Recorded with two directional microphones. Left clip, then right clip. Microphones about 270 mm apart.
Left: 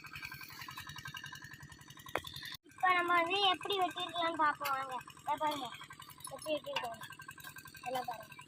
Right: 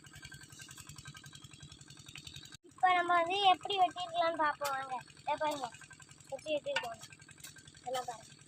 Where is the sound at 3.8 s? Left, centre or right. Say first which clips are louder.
Right 4 dB; centre.